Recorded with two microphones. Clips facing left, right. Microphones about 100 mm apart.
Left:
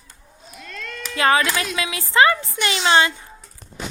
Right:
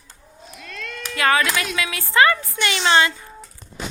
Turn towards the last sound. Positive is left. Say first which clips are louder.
# even
turn(degrees=25)  # may be behind; listen again after turning